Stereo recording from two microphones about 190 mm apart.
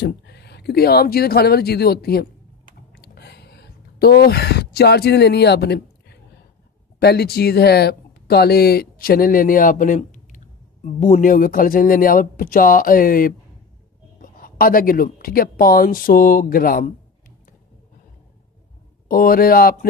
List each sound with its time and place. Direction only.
0.0 s speech: 60° left (ahead or behind)
2.9 s a sound: 55° left (ahead or behind)
7.0 s speech: 55° left (ahead or behind)
14.1 s a sound: 50° left (ahead or behind)
15.0 s speech: 50° left (ahead or behind)
19.0 s speech: 45° left (ahead or behind)